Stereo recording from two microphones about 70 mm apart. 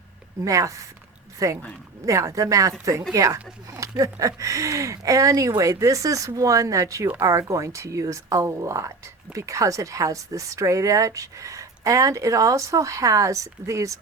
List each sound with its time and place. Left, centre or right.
0.4 s speech: right